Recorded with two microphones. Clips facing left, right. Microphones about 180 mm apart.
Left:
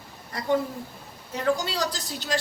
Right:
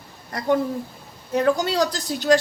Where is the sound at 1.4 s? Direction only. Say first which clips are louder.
Right 4 dB; 50° right (ahead or behind).